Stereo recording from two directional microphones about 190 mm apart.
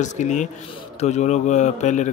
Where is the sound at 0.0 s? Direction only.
40° left (ahead or behind).